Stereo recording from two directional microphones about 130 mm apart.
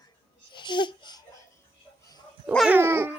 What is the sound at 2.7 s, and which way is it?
Dog, 20° right (ahead or behind).